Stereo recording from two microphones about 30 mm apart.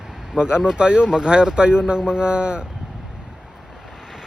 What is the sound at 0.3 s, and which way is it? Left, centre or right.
Speech, right.